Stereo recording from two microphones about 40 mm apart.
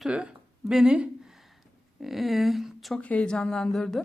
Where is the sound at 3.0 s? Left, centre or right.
Left.